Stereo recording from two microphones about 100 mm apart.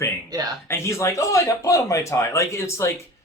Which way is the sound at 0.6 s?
25° left (ahead or behind).